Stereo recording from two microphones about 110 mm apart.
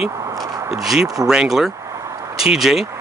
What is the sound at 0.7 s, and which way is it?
Speech, 5° right (ahead or behind).